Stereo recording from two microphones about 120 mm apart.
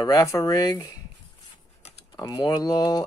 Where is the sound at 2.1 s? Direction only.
35° left (ahead or behind).